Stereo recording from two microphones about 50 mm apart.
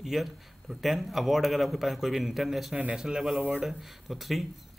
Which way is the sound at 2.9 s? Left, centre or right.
Centre.